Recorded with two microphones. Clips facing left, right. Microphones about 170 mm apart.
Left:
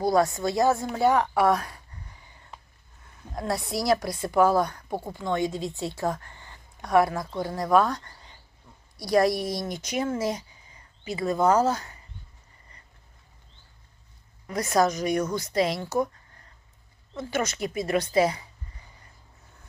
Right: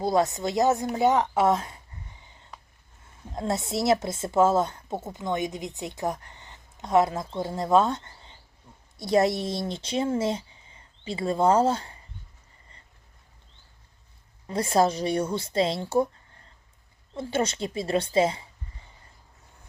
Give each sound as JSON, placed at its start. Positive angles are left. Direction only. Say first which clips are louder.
{"t": 0.0, "sound": "a woman's voice", "louder": "left 1 dB", "side_deg": -20}
{"t": 14.4, "sound": "a woman's voice", "louder": "right 1 dB", "side_deg": -30}
{"t": 17.2, "sound": "a woman's voice", "louder": "right 1 dB", "side_deg": -30}